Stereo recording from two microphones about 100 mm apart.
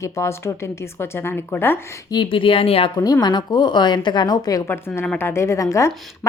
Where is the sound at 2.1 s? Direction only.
55° left (ahead or behind).